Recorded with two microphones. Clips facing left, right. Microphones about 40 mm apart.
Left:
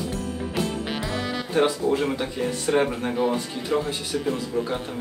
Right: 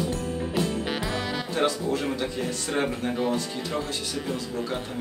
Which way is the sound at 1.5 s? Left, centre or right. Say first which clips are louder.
Left 5 dB; left.